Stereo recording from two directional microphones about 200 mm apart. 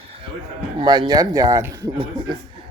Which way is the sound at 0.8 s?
20° right (ahead or behind).